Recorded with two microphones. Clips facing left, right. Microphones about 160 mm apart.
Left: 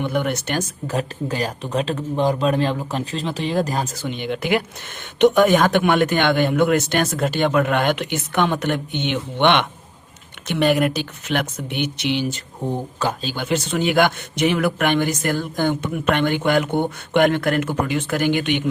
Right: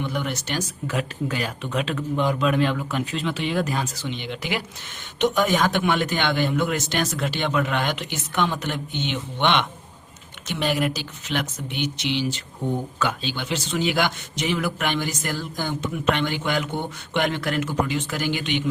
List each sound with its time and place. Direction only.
0.0 s speech: 55° left (ahead or behind)
0.9 s speech: 35° left (ahead or behind); by 12.4 s 50° left (ahead or behind)
12.6 s speech: 35° left (ahead or behind); by 18.7 s 55° left (ahead or behind)